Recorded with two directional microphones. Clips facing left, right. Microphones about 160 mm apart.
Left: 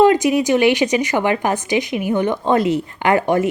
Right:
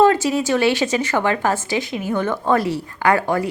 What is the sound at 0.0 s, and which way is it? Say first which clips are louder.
Speech: left 2 dB; 15° left (ahead or behind).